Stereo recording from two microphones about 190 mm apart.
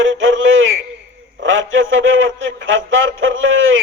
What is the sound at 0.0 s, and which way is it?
A man's voice, 90° right.